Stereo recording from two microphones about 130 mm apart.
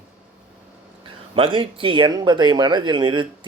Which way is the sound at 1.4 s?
40° right (ahead or behind).